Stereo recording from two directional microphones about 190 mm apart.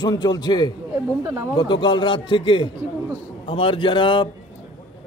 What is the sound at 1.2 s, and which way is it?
Speech, 15° right (ahead or behind).